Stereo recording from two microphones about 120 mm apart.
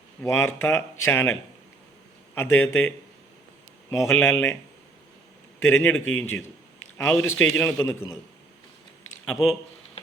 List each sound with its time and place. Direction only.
0.3 s speech: 20° left (ahead or behind)
2.3 s a man's voice: 15° left (ahead or behind)
3.9 s speech: 25° left (ahead or behind)
5.5 s a man's voice: 15° left (ahead or behind)
7.9 s speech: 25° left (ahead or behind)
9.2 s speech: 5° left (ahead or behind)